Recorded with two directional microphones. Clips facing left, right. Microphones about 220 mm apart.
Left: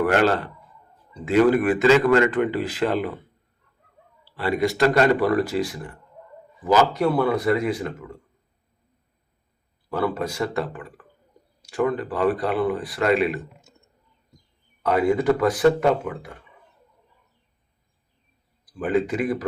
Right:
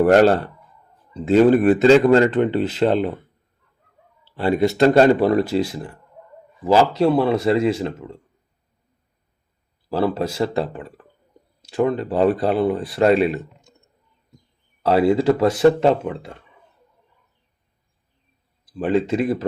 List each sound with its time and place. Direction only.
0.0 s a man's voice: 35° right (ahead or behind)
4.3 s speech: 25° right (ahead or behind)
9.9 s speech: 25° right (ahead or behind)
14.8 s speech: 30° right (ahead or behind)
18.8 s speech: 30° right (ahead or behind)